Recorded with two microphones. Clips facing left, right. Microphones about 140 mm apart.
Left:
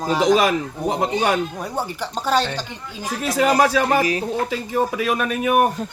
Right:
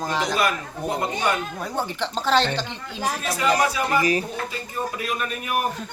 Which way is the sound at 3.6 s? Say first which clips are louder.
Left 4 dB; 90° left.